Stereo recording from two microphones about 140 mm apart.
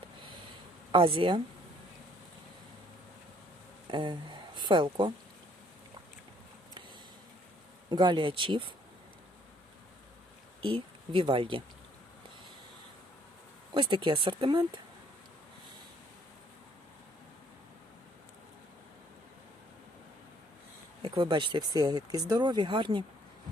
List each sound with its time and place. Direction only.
0.9 s speech: 40° right (ahead or behind)
3.8 s speech: 35° right (ahead or behind)
7.9 s speech: 35° right (ahead or behind)
10.6 s speech: 40° right (ahead or behind)
13.7 s speech: 35° right (ahead or behind)
21.0 s speech: 35° right (ahead or behind)